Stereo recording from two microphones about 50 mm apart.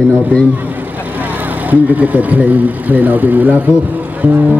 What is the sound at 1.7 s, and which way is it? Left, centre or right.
Speech, right.